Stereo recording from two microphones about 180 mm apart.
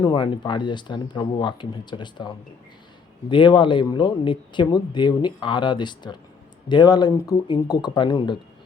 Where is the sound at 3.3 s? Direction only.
25° left (ahead or behind).